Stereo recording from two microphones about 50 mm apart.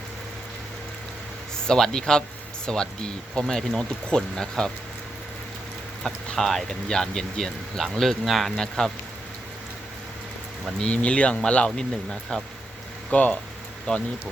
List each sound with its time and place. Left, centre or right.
1.6 s speech: centre
6.0 s speech: centre
8.5 s speech: centre
10.9 s speech: left
13.1 s speech: left